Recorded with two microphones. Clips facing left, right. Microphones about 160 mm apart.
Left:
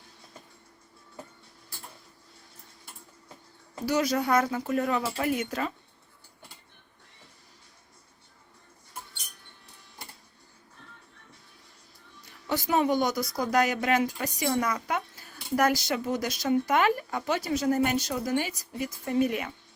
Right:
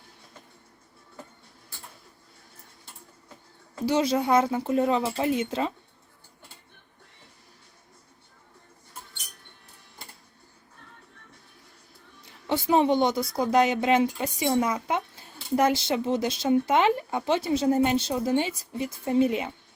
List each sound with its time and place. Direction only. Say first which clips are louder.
3.8 s a woman's voice: right 3 dB; 25° right (ahead or behind)
12.5 s a woman's voice: right 3 dB; 25° right (ahead or behind)